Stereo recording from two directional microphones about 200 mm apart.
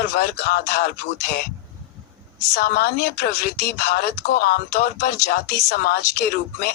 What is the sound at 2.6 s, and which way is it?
Speech, 50° left (ahead or behind).